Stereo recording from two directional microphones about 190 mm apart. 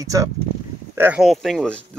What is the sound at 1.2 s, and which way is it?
Speech, centre (ahead or behind).